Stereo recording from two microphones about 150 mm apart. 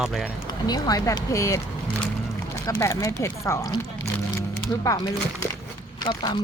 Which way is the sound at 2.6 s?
20° left (ahead or behind).